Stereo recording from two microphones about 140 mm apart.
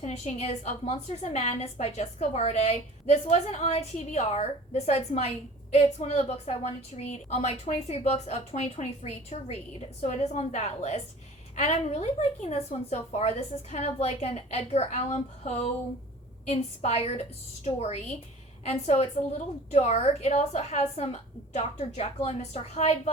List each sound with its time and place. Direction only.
0.0 s a woman's voice: 50° left (ahead or behind)